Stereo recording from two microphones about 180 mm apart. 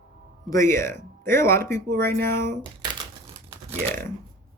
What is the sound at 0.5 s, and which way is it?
Speech, 15° left (ahead or behind).